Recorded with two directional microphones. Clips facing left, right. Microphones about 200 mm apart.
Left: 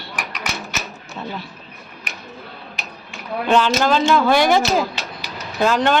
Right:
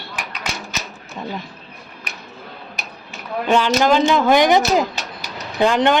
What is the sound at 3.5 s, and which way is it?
Speech, 15° right (ahead or behind).